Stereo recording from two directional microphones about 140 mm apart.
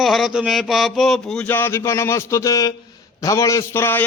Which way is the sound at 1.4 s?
15° left (ahead or behind).